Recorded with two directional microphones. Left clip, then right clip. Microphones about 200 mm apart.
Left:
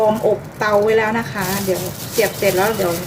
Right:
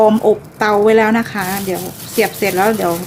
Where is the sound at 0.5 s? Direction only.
60° right (ahead or behind).